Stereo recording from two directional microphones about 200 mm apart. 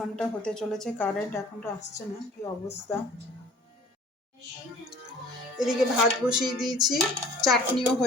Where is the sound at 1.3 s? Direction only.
15° left (ahead or behind).